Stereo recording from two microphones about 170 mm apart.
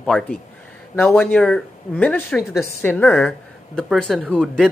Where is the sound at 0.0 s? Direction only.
5° left (ahead or behind).